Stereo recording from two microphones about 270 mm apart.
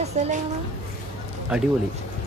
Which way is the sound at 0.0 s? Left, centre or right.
Right.